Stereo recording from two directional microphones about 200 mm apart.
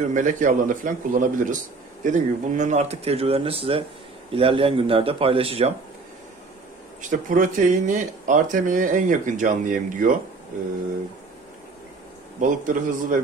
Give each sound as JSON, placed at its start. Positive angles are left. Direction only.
{"t": 0.1, "sound": "speech", "side_deg": -40}
{"t": 7.0, "sound": "speech", "side_deg": -40}
{"t": 12.4, "sound": "speech", "side_deg": -40}